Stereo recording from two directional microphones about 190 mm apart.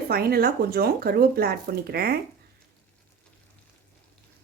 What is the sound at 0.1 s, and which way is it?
Speech, 55° right (ahead or behind).